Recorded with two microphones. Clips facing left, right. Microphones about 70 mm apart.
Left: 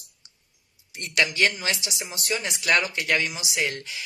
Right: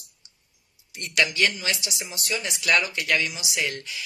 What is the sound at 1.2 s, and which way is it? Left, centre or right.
Speech, left.